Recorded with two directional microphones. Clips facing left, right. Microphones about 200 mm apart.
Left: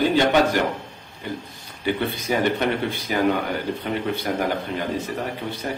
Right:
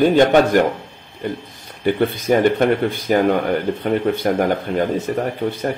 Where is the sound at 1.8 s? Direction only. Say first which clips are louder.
Right 7 dB; 50° right (ahead or behind).